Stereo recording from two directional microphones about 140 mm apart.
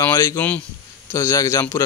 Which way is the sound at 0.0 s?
20° left (ahead or behind).